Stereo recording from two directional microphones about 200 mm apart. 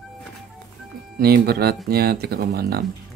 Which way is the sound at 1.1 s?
50° right (ahead or behind).